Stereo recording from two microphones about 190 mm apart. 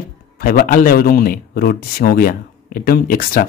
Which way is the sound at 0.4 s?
50° left (ahead or behind).